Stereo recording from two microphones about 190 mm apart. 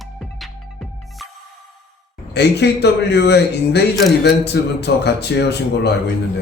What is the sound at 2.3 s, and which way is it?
A man's voice, 60° left (ahead or behind).